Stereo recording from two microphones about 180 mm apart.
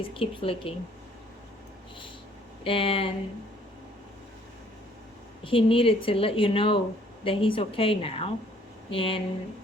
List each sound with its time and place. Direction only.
0.0 s a woman's voice: 30° left (ahead or behind)
2.6 s a woman's voice: 30° left (ahead or behind)
5.4 s a woman's voice: 30° left (ahead or behind)